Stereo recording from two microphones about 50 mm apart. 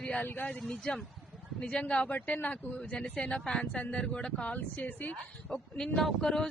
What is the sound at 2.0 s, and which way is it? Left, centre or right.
Speech, left.